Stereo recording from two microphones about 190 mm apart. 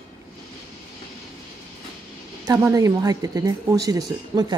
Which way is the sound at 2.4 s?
15° right (ahead or behind).